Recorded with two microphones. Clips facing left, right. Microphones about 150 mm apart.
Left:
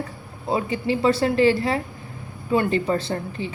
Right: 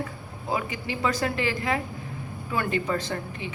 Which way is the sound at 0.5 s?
30° left (ahead or behind).